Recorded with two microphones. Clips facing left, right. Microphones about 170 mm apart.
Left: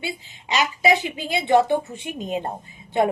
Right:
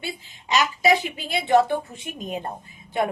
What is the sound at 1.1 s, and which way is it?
A woman's voice, 20° left (ahead or behind).